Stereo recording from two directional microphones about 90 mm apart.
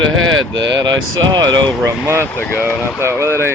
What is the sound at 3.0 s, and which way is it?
Speech, 30° right (ahead or behind).